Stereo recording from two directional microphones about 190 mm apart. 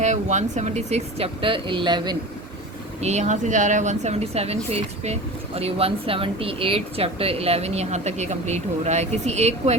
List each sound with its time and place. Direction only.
0.0 s speech: 40° right (ahead or behind)
3.0 s speech: 35° right (ahead or behind)